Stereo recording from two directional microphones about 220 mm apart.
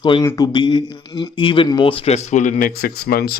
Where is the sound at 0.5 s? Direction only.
20° left (ahead or behind).